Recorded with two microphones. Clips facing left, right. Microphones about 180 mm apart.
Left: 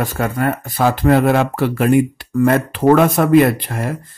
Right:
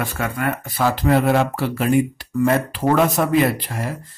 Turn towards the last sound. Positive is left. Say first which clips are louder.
# left 4 dB
turn(degrees=55)  # may be behind; listen again after turning